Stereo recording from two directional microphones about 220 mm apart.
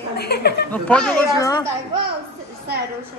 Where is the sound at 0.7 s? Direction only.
5° left (ahead or behind).